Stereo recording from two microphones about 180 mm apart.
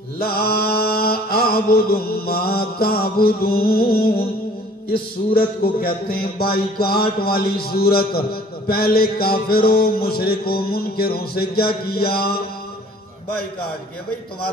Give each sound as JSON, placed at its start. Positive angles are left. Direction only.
{"t": 0.2, "sound": "mantra", "side_deg": 55}
{"t": 5.3, "sound": "music", "side_deg": 55}